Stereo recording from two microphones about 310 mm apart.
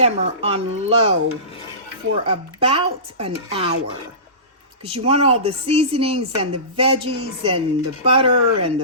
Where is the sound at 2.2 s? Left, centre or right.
Centre.